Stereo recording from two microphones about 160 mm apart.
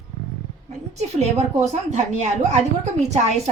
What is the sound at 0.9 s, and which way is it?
A woman's voice, 45° right (ahead or behind).